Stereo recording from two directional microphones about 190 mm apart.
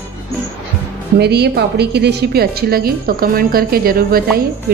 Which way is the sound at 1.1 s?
60° right (ahead or behind).